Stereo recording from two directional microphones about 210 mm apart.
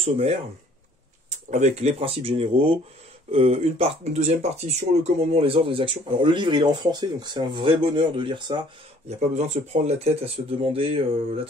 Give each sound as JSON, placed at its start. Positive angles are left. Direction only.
{"t": 0.0, "sound": "speech", "side_deg": -30}
{"t": 1.5, "sound": "speech", "side_deg": -30}
{"t": 9.2, "sound": "speech", "side_deg": -30}